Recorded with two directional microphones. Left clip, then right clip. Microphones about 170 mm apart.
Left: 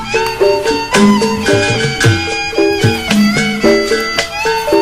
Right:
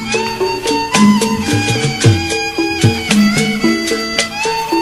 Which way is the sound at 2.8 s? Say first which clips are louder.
Left 1 dB; 10° left (ahead or behind).